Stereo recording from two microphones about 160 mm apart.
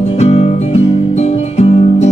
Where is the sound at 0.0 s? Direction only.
40° left (ahead or behind).